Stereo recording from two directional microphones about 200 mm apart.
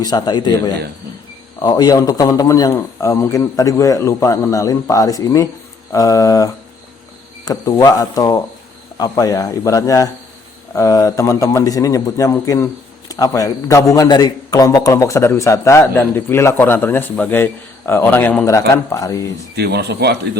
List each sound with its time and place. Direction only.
0.0 s speech: 20° left (ahead or behind)
1.6 s a man's voice: 20° left (ahead or behind)
19.5 s speech: 55° right (ahead or behind)